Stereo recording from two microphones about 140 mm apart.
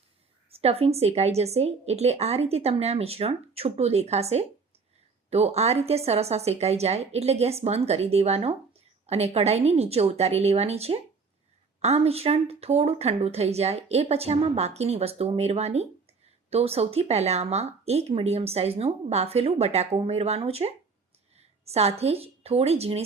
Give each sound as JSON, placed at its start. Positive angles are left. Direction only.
{"t": 0.5, "sound": "a woman's voice", "side_deg": -45}